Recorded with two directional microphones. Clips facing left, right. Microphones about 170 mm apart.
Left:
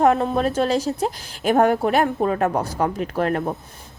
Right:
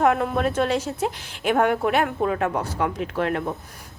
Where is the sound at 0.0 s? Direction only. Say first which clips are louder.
Left 3 dB; 35° left (ahead or behind).